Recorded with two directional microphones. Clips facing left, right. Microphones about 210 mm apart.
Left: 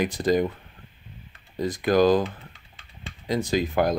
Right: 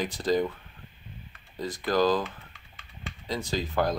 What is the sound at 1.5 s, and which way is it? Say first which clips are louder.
Speech: left 6 dB; 15° left (ahead or behind).